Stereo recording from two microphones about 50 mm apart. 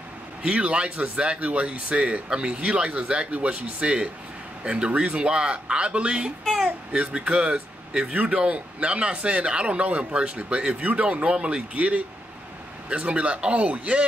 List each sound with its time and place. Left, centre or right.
0.4 s speech: right